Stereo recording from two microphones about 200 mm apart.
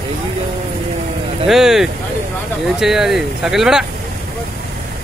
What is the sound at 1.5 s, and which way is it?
Speech, centre (ahead or behind).